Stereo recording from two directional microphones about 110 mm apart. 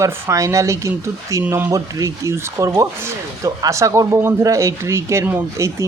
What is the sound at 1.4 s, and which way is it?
Speech, 15° right (ahead or behind).